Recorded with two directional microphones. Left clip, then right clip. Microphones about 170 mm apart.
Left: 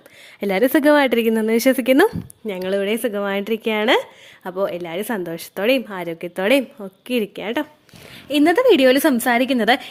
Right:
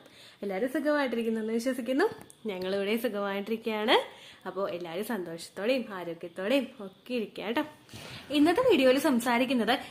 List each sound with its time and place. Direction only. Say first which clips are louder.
0.3 s speech: left 14 dB; 65° left (ahead or behind)
2.5 s a woman's voice: left 9 dB; 45° left (ahead or behind)
7.4 s a woman's voice: left 7 dB; 40° left (ahead or behind)